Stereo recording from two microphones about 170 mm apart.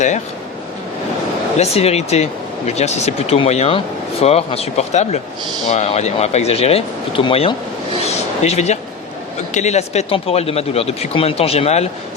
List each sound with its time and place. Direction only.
1.5 s speech: 40° left (ahead or behind)